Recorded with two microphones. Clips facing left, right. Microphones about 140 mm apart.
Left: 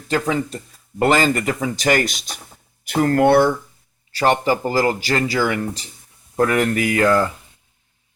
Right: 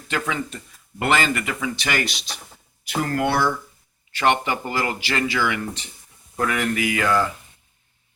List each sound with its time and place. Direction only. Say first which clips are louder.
0.1 s speech: left 6 dB; 35° left (ahead or behind); by 3.5 s 55° left (ahead or behind)
4.1 s speech: left 4 dB; 35° left (ahead or behind)